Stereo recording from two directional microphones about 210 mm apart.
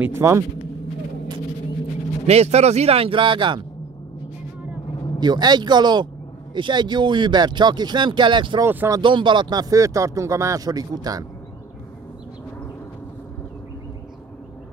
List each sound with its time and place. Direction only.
0.0 s speech: 10° right (ahead or behind)
2.2 s speech: 30° right (ahead or behind)
5.2 s speech: 20° right (ahead or behind)
8.6 s speech: 10° right (ahead or behind)